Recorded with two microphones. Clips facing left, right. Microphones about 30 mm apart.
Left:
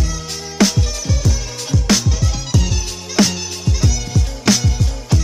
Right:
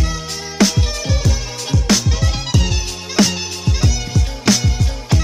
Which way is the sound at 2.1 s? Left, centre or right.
Right.